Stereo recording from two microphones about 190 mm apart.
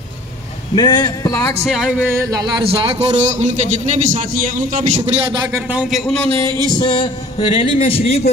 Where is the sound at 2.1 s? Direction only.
20° right (ahead or behind); by 3.6 s 35° right (ahead or behind).